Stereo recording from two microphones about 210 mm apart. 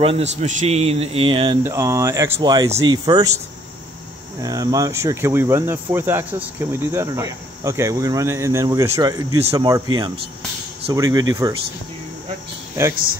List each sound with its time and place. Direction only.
0.0 s speech: 30° right (ahead or behind)
1.6 s speech: 10° right (ahead or behind)
4.4 s speech: 15° right (ahead or behind)
9.4 s speech: 30° right (ahead or behind)
9.7 s speech: 15° right (ahead or behind)